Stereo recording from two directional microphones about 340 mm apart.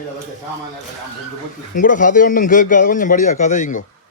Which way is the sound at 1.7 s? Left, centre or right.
Left.